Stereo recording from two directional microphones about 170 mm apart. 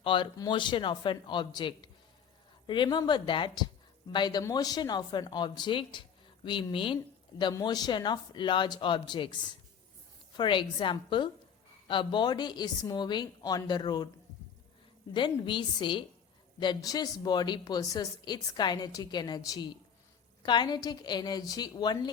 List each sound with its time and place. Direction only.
0.0 s speech: 30° left (ahead or behind)
15.1 s speech: 30° left (ahead or behind)